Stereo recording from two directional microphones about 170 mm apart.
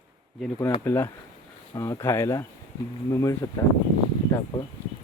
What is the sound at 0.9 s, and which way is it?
Speech, 15° left (ahead or behind).